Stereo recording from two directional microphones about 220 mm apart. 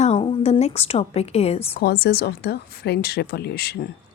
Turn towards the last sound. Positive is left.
turn(degrees=45)  # may be behind; listen again after turning